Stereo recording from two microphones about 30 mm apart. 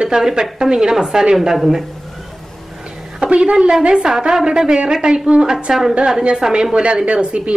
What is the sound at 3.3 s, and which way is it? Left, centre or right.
A woman's voice, right.